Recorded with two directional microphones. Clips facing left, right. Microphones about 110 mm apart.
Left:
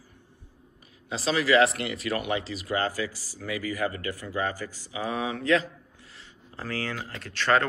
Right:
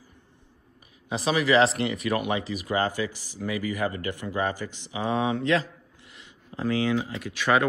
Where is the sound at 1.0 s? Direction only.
20° right (ahead or behind).